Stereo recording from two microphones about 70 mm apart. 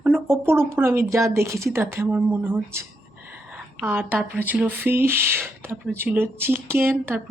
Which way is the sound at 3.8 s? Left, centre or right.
Right.